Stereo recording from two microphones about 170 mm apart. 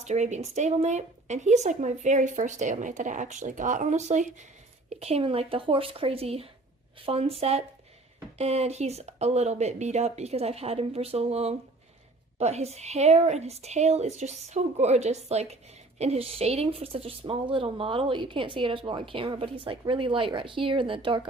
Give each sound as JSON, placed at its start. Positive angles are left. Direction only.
{"t": 0.0, "sound": "a woman's voice", "side_deg": -45}